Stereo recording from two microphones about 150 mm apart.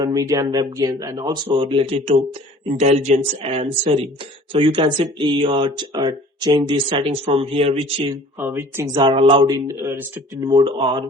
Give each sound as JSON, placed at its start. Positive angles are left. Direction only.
{"t": 0.0, "sound": "speech", "side_deg": -25}
{"t": 1.5, "sound": "speech", "side_deg": -35}
{"t": 8.4, "sound": "speech", "side_deg": -15}
{"t": 8.9, "sound": "speech", "side_deg": -35}
{"t": 10.5, "sound": "speech", "side_deg": -30}